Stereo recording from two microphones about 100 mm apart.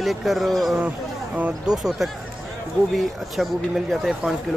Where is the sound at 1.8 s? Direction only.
5° right (ahead or behind).